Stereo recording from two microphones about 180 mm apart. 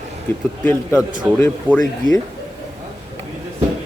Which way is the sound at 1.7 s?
25° right (ahead or behind).